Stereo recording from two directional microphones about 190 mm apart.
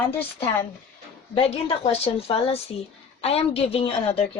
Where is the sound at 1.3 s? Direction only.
30° left (ahead or behind).